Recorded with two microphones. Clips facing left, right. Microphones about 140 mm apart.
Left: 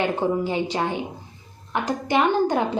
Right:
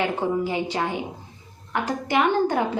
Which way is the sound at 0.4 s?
25° left (ahead or behind).